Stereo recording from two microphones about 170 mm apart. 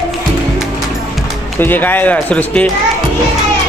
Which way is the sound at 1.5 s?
10° left (ahead or behind).